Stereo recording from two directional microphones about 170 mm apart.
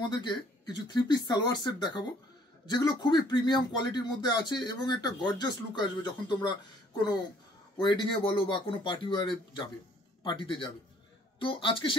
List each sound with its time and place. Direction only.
0.1 s speech: 25° left (ahead or behind)
7.8 s a man's voice: 25° left (ahead or behind)